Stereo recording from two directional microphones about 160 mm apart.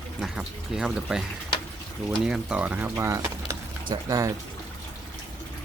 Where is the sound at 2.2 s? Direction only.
5° right (ahead or behind); by 4.3 s 20° right (ahead or behind).